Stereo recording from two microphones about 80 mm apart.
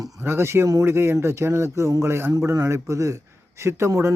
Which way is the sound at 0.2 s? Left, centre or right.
Right.